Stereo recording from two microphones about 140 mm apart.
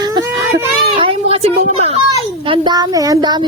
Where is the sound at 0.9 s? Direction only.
40° right (ahead or behind).